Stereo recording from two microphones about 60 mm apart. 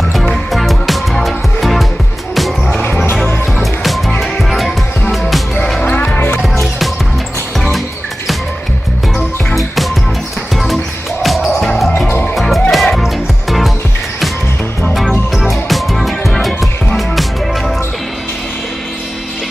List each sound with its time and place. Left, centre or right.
0.1 s music: centre
6.1 s music: left
7.5 s music: centre
10.5 s music: centre
14.9 s music: centre